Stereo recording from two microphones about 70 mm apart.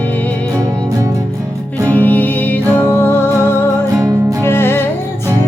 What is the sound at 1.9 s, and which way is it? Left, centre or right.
Music, left.